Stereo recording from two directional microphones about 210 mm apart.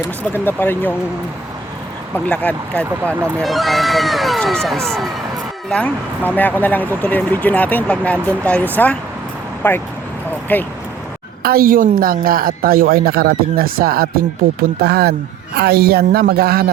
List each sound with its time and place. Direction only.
0.2 s speech: 10° left (ahead or behind)
2.1 s speech: 5° left (ahead or behind)
11.4 s speech: 45° right (ahead or behind)